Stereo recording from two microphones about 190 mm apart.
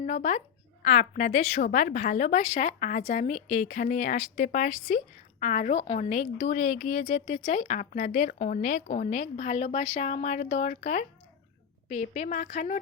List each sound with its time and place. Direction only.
0.0 s speech: 40° left (ahead or behind)